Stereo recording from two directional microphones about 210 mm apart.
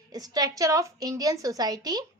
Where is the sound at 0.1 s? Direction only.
20° right (ahead or behind).